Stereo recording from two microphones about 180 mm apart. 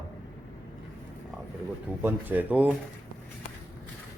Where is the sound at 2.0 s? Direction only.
10° right (ahead or behind).